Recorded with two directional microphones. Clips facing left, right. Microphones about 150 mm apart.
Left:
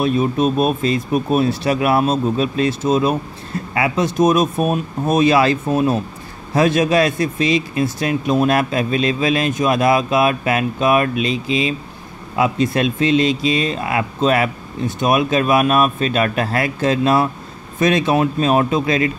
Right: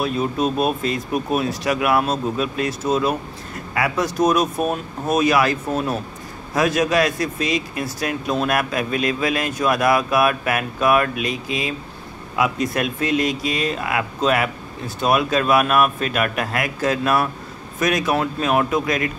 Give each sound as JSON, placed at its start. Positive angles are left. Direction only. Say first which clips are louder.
{"t": 0.0, "sound": "speech", "louder": "left 4 dB", "side_deg": 20}